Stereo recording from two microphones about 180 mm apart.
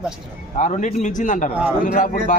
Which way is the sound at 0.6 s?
40° left (ahead or behind).